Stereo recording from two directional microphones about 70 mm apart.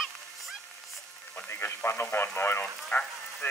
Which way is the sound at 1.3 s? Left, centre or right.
Left.